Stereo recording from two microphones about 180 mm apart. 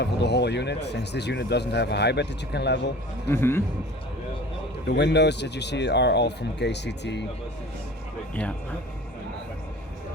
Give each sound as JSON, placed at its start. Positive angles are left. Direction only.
{"t": 0.0, "sound": "speech", "side_deg": 70}
{"t": 3.2, "sound": "a man's voice", "side_deg": 15}
{"t": 4.9, "sound": "speech", "side_deg": 70}